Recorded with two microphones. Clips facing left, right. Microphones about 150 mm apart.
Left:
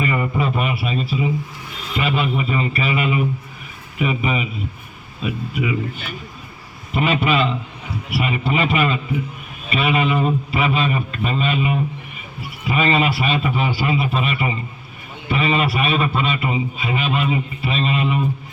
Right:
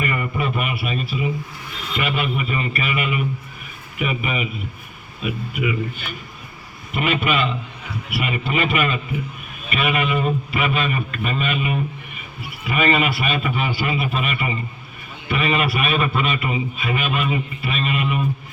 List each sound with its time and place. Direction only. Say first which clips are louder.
0.0 s a sound: left 3 dB; 30° left (ahead or behind)
2.0 s a man's voice: left 3 dB; 30° left (ahead or behind)
6.9 s a man's voice: left 3 dB; 30° left (ahead or behind)